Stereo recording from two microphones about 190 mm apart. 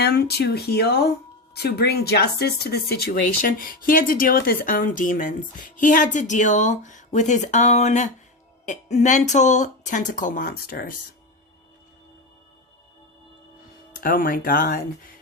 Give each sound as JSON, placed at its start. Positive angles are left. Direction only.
{"t": 0.0, "sound": "speech", "side_deg": 60}
{"t": 14.0, "sound": "speech", "side_deg": 50}